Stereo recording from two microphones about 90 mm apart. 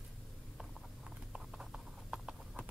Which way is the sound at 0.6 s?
5° right (ahead or behind).